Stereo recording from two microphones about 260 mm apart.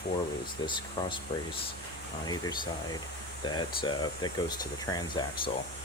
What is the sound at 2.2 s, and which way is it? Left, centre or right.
Speech, centre.